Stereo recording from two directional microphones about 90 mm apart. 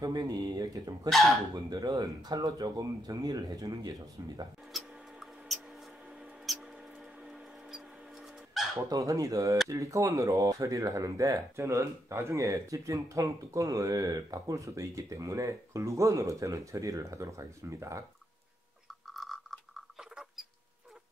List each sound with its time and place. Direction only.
0.0 s speech: 45° right (ahead or behind)
4.7 s mouse: centre (ahead or behind)
8.7 s speech: 40° right (ahead or behind)
19.0 s a sound: centre (ahead or behind)